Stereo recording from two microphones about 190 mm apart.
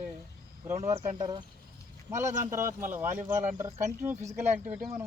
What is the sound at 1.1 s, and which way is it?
Speech, 20° right (ahead or behind).